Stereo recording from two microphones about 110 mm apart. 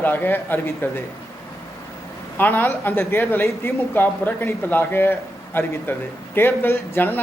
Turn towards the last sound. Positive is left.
turn(degrees=20)  # may be behind; listen again after turning